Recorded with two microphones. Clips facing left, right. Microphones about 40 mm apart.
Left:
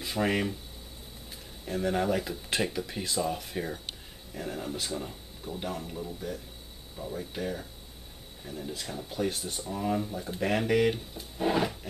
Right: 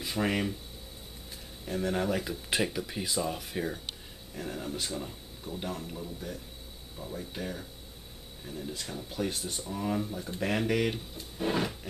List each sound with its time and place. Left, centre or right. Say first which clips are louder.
0.0 s speech: left 2 dB; centre
1.7 s speech: left 2 dB; centre